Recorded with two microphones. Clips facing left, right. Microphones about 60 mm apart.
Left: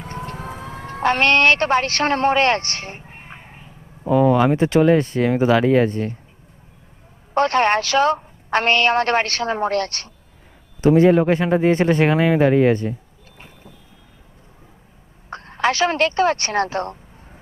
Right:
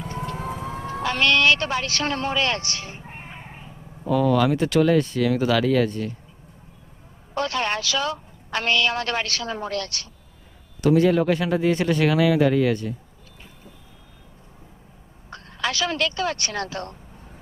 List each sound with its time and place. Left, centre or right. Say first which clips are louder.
0.0 s vehicle: right 1 dB; left
0.8 s a man's voice: left 6 dB; left
4.0 s speech: left 4 dB; left
7.3 s a woman's voice: left 8 dB; left
10.8 s a woman's voice: left 4 dB; left
15.3 s speech: left 7 dB; left